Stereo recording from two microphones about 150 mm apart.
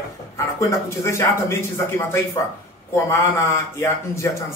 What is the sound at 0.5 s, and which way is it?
Speech, 20° left (ahead or behind).